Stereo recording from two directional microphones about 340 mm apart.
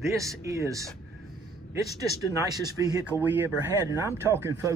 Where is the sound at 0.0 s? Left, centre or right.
Centre.